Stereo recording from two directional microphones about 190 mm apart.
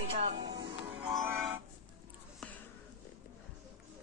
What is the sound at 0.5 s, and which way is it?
Music, 60° right (ahead or behind).